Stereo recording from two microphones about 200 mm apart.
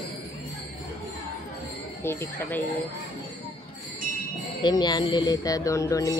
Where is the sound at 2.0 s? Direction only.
10° left (ahead or behind).